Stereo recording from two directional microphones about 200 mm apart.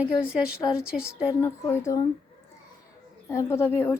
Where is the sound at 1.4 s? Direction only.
15° left (ahead or behind).